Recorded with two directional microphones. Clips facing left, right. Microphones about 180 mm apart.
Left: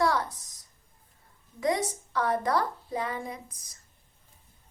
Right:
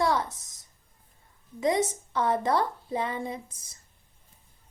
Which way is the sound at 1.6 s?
25° right (ahead or behind).